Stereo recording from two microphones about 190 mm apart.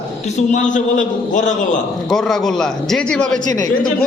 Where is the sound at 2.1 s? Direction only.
Centre (ahead or behind).